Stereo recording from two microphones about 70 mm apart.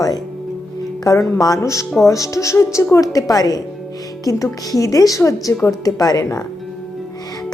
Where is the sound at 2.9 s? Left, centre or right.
Left.